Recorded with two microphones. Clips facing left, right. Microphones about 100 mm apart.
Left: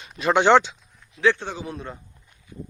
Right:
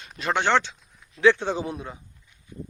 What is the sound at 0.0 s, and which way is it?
Speech, 5° left (ahead or behind).